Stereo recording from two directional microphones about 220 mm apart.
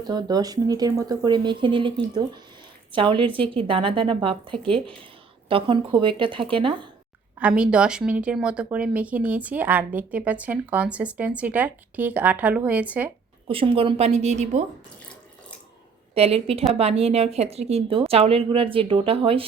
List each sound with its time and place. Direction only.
0.0 s a woman's voice: 20° right (ahead or behind)
7.3 s speech: 5° right (ahead or behind)
13.5 s a woman's voice: 25° right (ahead or behind)
16.1 s a woman's voice: 25° right (ahead or behind)